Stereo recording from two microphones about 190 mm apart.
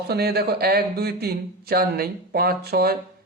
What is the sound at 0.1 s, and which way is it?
A man's voice, 55° right (ahead or behind).